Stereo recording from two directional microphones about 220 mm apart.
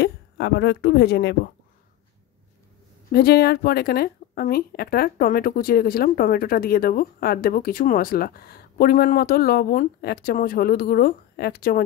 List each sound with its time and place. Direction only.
0.0 s speech: 50° left (ahead or behind)
3.1 s a woman's voice: 45° left (ahead or behind)